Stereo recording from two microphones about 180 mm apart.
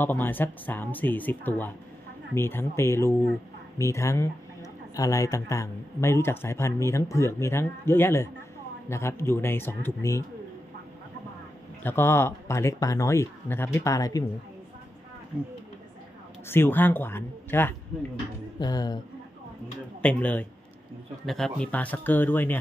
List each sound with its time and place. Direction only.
0.0 s speech: 10° left (ahead or behind)
11.8 s speech: 15° left (ahead or behind)
16.4 s speech: 10° left (ahead or behind)
20.0 s speech: 5° left (ahead or behind)